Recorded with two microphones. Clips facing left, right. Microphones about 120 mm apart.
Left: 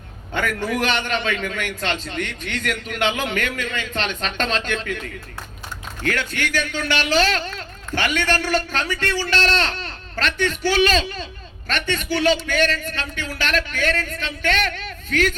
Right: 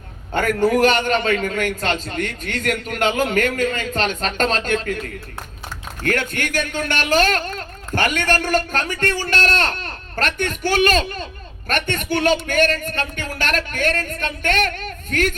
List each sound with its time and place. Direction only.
0.3 s speech: 45° right (ahead or behind)